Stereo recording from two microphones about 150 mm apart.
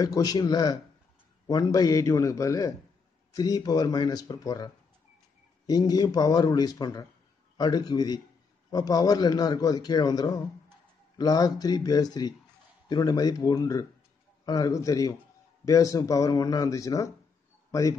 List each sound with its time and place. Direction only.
0.0 s a man's voice: 25° left (ahead or behind)
5.7 s a man's voice: 25° left (ahead or behind)